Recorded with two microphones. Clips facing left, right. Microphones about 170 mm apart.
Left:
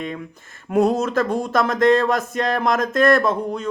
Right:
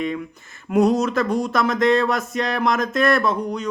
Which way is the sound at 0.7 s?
50° left (ahead or behind).